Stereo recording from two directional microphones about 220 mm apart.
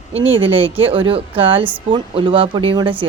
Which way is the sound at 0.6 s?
25° right (ahead or behind).